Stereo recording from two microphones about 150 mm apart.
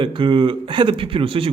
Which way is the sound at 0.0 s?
35° right (ahead or behind).